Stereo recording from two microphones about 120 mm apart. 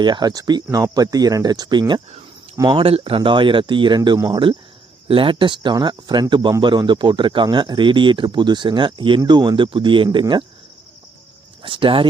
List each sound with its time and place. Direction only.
0.0 s speech: 35° right (ahead or behind)
2.7 s speech: 50° right (ahead or behind)
11.6 s speech: 45° right (ahead or behind)